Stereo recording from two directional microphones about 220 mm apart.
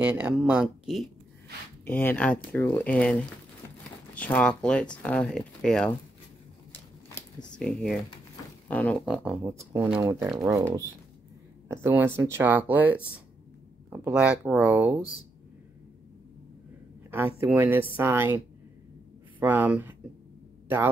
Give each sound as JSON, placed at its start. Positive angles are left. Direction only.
{"t": 0.0, "sound": "speech", "side_deg": -10}
{"t": 6.7, "sound": "shuffling cards", "side_deg": 10}
{"t": 8.6, "sound": "speech", "side_deg": 5}
{"t": 9.0, "sound": "speech", "side_deg": -5}
{"t": 17.4, "sound": "speech", "side_deg": -10}
{"t": 19.4, "sound": "speech", "side_deg": -10}